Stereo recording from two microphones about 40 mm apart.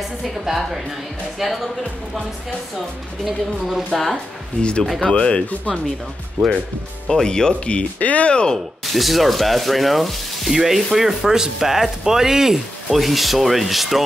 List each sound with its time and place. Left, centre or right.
0.2 s speech: centre
3.3 s speech: centre
4.6 s speech: left
7.1 s speech: centre
7.7 s speech: left
8.8 s speech: centre